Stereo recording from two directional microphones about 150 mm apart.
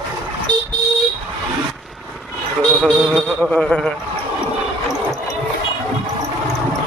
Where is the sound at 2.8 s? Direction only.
5° left (ahead or behind).